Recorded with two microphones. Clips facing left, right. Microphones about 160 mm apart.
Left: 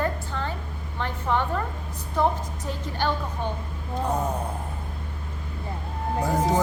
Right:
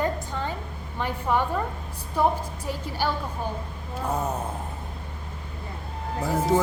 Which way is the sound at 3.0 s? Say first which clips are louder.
Left 1 dB; 10° right (ahead or behind).